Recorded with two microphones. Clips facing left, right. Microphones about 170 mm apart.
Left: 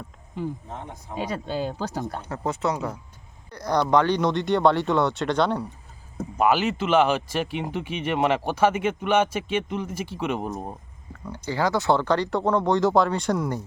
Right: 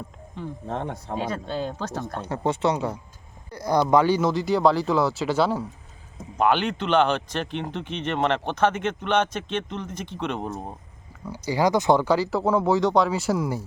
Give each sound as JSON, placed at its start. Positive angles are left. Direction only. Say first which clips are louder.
{"t": 0.7, "sound": "speech", "louder": "right 7 dB", "side_deg": -70}
{"t": 1.2, "sound": "speech", "louder": "left 2 dB", "side_deg": 10}
{"t": 2.6, "sound": "speech", "louder": "right 3 dB", "side_deg": 0}
{"t": 11.4, "sound": "speech", "louder": "right 2 dB", "side_deg": -15}